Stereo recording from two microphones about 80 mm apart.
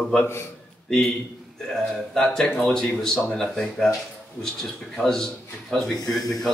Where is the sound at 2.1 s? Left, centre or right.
Centre.